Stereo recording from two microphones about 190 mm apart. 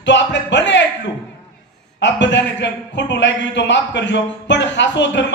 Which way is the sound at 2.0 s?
70° left (ahead or behind).